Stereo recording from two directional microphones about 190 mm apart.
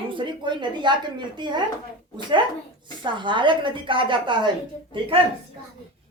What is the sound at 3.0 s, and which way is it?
A woman's voice, 25° right (ahead or behind).